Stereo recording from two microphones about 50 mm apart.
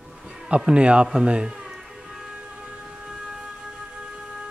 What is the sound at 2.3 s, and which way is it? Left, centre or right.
Siren, centre.